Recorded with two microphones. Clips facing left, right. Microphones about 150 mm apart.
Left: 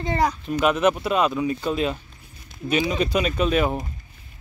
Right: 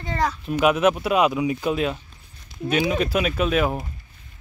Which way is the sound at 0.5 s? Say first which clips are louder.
Right 3 dB; 5° right (ahead or behind).